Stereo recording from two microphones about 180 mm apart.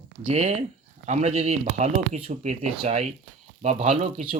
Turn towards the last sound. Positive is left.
turn(degrees=-35)  # may be behind; listen again after turning